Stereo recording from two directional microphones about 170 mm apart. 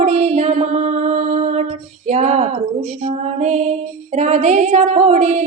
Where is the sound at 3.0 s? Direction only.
45° right (ahead or behind).